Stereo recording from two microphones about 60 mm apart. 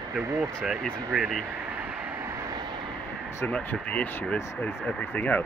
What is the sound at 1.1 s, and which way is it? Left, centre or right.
Speech, centre.